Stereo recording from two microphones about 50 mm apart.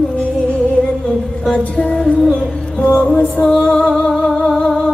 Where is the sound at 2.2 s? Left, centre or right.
Centre.